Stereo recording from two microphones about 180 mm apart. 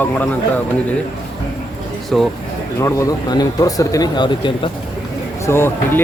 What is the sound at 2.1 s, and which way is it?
Speech, centre (ahead or behind).